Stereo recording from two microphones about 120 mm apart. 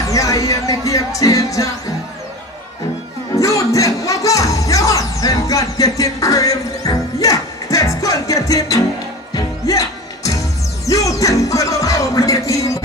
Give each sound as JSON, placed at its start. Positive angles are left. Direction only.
{"t": 0.0, "sound": "music", "side_deg": 25}
{"t": 3.3, "sound": "music", "side_deg": 25}